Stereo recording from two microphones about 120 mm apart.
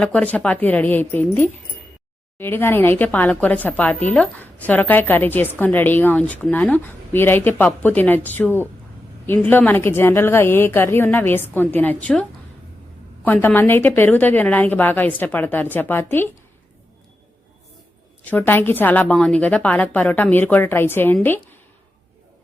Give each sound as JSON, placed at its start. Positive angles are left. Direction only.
{"t": 0.0, "sound": "a woman's voice", "side_deg": 10}
{"t": 13.2, "sound": "a woman's voice", "side_deg": 15}
{"t": 18.3, "sound": "a woman's voice", "side_deg": 15}